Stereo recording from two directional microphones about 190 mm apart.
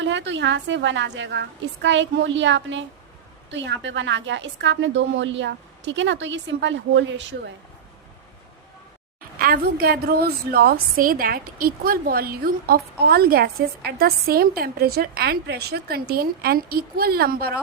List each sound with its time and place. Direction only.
0.0 s a woman's voice: 70° right (ahead or behind)
9.4 s a woman's voice: 50° right (ahead or behind)